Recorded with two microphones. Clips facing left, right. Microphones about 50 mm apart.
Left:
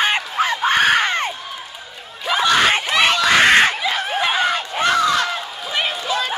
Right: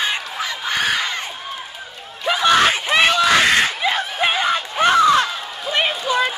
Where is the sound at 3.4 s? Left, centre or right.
Left.